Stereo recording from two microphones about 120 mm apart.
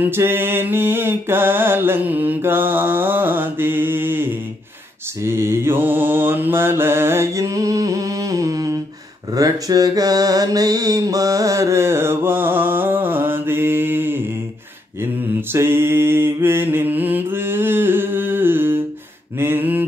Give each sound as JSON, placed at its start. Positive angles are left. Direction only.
{"t": 0.0, "sound": "mantra", "side_deg": -20}
{"t": 15.5, "sound": "mantra", "side_deg": -20}